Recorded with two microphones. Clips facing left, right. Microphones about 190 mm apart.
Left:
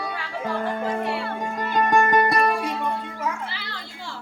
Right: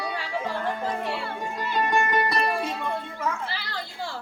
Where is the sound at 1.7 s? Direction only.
50° left (ahead or behind).